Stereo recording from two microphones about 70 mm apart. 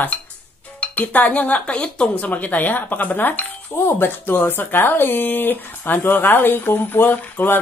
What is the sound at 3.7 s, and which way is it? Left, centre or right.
Speech, left.